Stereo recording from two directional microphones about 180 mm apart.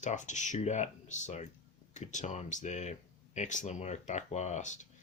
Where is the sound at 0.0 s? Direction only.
40° left (ahead or behind).